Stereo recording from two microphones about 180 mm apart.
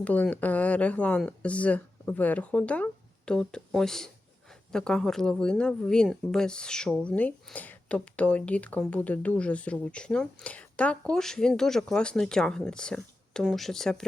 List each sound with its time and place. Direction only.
0.0 s speech: 10° left (ahead or behind)